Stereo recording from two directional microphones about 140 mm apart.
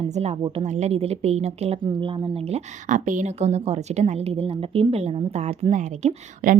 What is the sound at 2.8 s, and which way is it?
A woman's voice, 65° right (ahead or behind).